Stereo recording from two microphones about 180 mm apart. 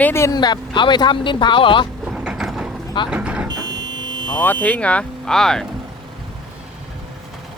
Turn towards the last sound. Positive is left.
turn(degrees=5)  # may be behind; listen again after turning